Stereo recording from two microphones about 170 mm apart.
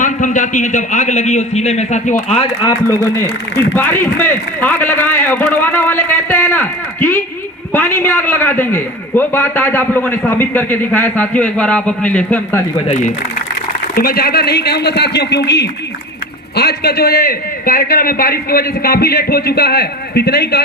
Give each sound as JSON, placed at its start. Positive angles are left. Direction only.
{"t": 0.0, "sound": "a man's voice", "side_deg": 50}
{"t": 2.6, "sound": "a man's voice", "side_deg": 20}
{"t": 12.9, "sound": "a man's voice", "side_deg": 45}
{"t": 13.9, "sound": "speech", "side_deg": 60}
{"t": 16.6, "sound": "a man's voice", "side_deg": 70}